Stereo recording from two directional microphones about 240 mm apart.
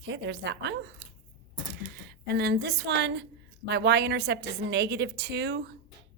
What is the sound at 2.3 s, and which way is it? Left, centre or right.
Speech, right.